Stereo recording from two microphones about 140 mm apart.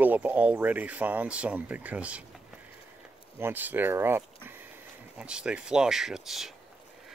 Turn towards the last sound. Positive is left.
turn(degrees=0)  # may be behind; listen again after turning